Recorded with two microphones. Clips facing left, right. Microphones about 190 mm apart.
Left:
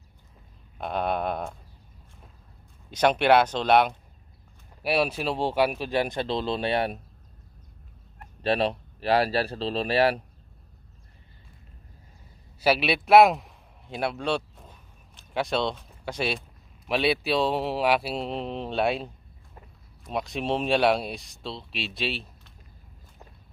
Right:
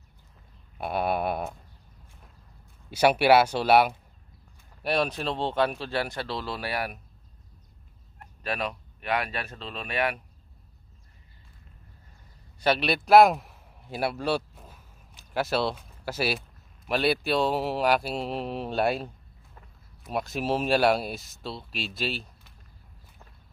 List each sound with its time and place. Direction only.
0.7 s speech: 10° right (ahead or behind)
2.9 s speech: 10° right (ahead or behind)
4.8 s speech: 5° left (ahead or behind); by 7.0 s 25° left (ahead or behind)
8.4 s speech: 30° left (ahead or behind)
12.5 s a man's voice: 5° left (ahead or behind)
20.1 s speech: 5° right (ahead or behind)